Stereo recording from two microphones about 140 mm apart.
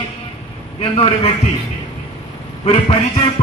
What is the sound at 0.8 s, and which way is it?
Speech, 45° left (ahead or behind).